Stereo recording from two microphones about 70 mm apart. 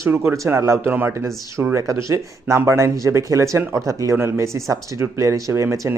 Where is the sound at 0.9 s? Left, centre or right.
Right.